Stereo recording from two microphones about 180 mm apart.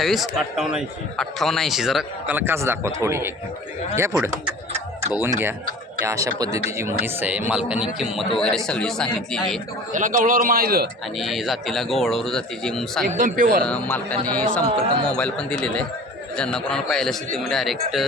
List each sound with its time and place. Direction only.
0.0 s a man's voice: centre (ahead or behind)
9.9 s a man's voice: 45° right (ahead or behind)
11.2 s a man's voice: centre (ahead or behind)
13.1 s a man's voice: 45° right (ahead or behind)
13.7 s a man's voice: 10° left (ahead or behind)